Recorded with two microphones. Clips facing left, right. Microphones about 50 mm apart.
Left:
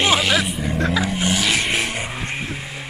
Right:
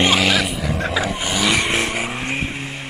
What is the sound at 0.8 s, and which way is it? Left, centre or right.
Vehicle, centre.